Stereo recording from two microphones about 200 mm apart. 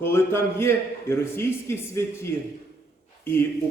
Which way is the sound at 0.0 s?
10° left (ahead or behind).